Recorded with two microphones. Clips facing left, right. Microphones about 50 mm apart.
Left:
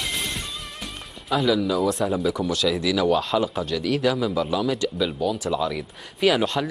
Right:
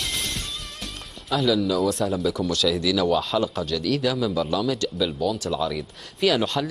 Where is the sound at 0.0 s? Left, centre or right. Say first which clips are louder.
Left 1 dB; centre.